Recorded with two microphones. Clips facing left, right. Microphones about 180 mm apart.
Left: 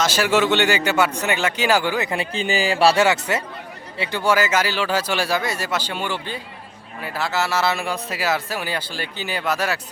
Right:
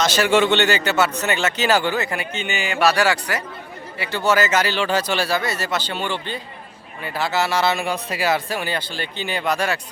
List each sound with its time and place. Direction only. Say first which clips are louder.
0.0 s speech: right 1 dB; 10° left (ahead or behind)
2.0 s speech: left 3 dB; 30° left (ahead or behind)
4.1 s speech: right 1 dB; 10° left (ahead or behind)